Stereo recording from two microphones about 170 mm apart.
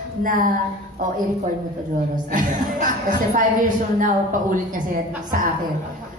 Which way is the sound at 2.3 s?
50° right (ahead or behind).